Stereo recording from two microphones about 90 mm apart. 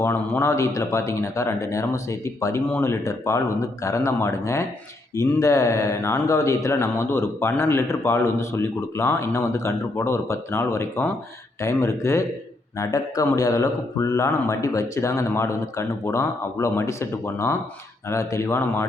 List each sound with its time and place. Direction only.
0.0 s speech: 25° left (ahead or behind)